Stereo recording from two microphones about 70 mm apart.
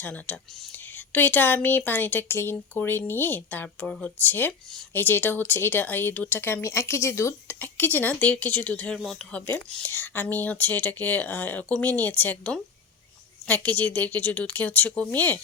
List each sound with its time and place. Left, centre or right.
0.0 s a woman's voice: left
7.6 s a woman's voice: left